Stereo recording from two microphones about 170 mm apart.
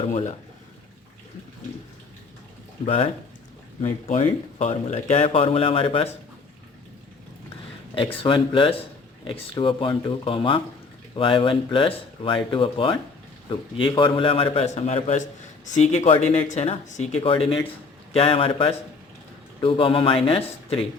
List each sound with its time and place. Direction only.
0.1 s speech: 45° left (ahead or behind)
2.8 s speech: 35° left (ahead or behind)
7.9 s speech: 30° left (ahead or behind)